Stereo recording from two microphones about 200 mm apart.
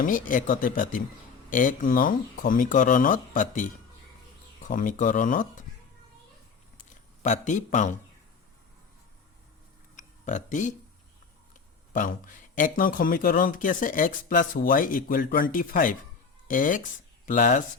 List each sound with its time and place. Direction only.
0.0 s speech: 40° left (ahead or behind)
4.7 s speech: 40° left (ahead or behind)
7.2 s speech: 40° left (ahead or behind)
9.9 s tick: 40° left (ahead or behind)
11.9 s speech: 40° left (ahead or behind)